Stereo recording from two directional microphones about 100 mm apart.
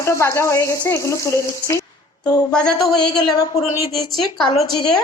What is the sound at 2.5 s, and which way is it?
Speech, 10° left (ahead or behind).